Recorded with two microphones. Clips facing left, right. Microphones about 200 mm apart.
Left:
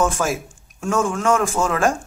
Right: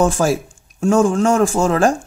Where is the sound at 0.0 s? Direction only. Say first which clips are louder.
Right 5 dB; 30° right (ahead or behind).